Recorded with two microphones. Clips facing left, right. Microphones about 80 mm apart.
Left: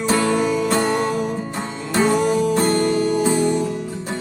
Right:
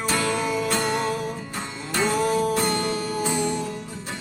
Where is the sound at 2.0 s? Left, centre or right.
Left.